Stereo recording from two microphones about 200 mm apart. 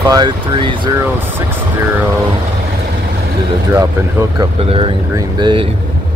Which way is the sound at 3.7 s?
15° right (ahead or behind).